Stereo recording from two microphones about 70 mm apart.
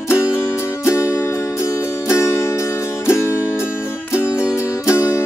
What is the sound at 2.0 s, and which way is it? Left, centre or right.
Music, left.